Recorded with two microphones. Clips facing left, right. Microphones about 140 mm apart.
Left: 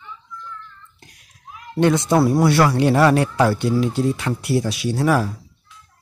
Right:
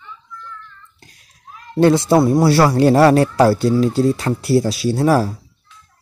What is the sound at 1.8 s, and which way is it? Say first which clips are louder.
Speech: right 4 dB; 30° right (ahead or behind).